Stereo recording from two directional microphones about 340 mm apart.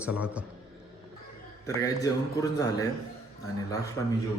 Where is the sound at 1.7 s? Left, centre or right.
Centre.